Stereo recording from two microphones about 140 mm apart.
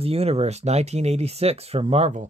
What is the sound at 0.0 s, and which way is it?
Speech, 45° right (ahead or behind).